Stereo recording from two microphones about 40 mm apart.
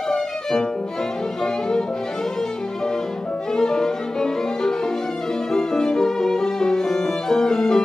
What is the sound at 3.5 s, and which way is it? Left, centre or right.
Violin, centre.